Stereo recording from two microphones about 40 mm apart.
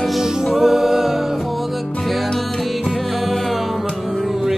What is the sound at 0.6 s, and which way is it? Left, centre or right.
Music, centre.